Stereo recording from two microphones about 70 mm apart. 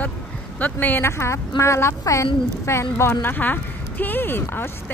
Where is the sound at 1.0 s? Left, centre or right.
Left.